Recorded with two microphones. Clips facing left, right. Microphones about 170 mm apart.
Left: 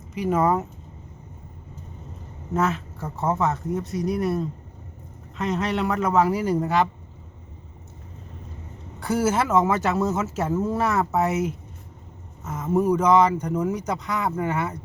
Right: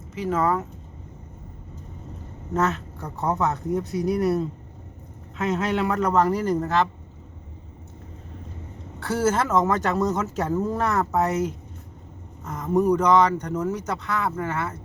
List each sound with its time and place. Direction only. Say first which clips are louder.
0.1 s speech: left 2 dB; 15° left (ahead or behind)
2.5 s speech: even; 5° left (ahead or behind)
9.0 s a woman's voice: even; 10° left (ahead or behind)